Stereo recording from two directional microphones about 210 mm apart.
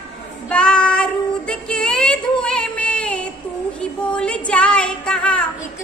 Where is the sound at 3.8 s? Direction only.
5° left (ahead or behind).